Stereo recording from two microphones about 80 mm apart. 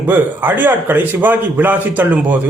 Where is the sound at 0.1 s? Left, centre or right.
Right.